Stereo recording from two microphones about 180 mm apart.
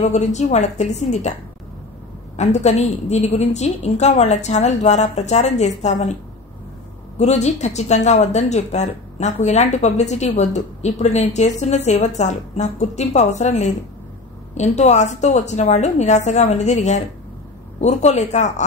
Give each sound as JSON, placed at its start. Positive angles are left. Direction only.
{"t": 0.0, "sound": "speech", "side_deg": 40}
{"t": 2.3, "sound": "speech", "side_deg": 40}
{"t": 7.2, "sound": "speech", "side_deg": 40}